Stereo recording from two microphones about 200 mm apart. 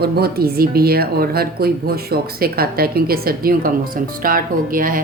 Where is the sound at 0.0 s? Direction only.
50° right (ahead or behind).